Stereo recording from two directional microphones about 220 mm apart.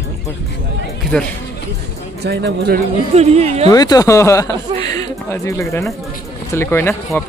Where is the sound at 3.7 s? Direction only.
15° left (ahead or behind).